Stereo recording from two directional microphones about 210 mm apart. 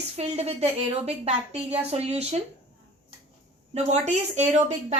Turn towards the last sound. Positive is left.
turn(degrees=-35)  # may be behind; listen again after turning